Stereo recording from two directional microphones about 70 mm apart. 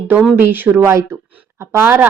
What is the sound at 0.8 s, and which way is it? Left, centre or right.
A woman's voice, right.